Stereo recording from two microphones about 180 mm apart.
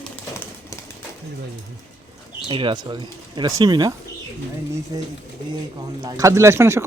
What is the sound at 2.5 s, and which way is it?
Speech, 25° right (ahead or behind).